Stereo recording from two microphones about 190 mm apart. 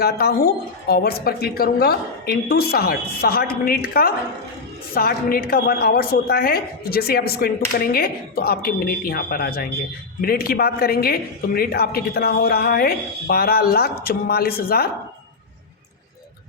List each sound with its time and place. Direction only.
0.0 s a woman's voice: 55° left (ahead or behind)